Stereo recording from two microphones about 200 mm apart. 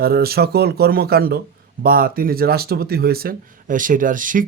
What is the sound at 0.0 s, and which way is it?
Speech, 50° right (ahead or behind).